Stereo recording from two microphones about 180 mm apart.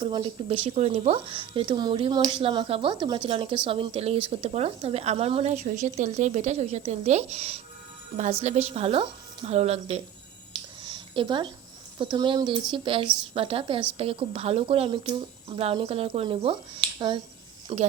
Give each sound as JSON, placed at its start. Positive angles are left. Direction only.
{"t": 0.0, "sound": "speech", "side_deg": -25}
{"t": 10.5, "sound": "a sound", "side_deg": -25}
{"t": 11.9, "sound": "speech", "side_deg": -25}